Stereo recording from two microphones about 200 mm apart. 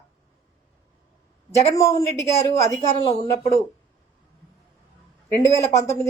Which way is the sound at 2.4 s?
30° left (ahead or behind).